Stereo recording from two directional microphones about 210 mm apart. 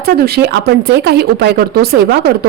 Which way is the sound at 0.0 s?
50° right (ahead or behind).